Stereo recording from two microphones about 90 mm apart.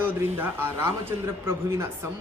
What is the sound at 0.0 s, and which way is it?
Speech, 20° right (ahead or behind).